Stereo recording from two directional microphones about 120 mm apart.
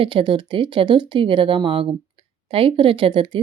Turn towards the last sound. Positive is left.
turn(degrees=-45)  # may be behind; listen again after turning